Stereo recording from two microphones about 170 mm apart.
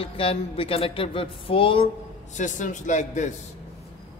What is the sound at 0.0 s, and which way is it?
Speech, 35° left (ahead or behind).